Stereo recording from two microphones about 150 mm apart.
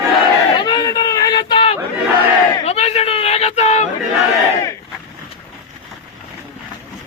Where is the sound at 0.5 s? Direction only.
30° left (ahead or behind).